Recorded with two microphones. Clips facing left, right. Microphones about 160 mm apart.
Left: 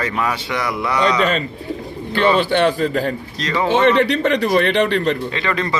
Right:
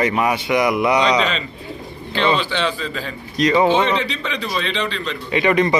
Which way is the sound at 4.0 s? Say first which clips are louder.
Left 9 dB; 60° left (ahead or behind).